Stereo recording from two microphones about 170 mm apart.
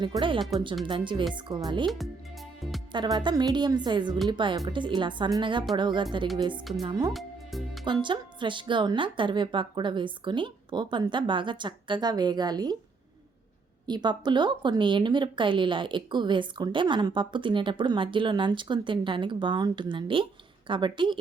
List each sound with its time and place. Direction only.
0.0 s speech: 30° right (ahead or behind)
2.9 s speech: 25° right (ahead or behind)
7.1 s speech: centre (ahead or behind)
7.9 s speech: 30° right (ahead or behind)
13.8 s speech: 25° right (ahead or behind)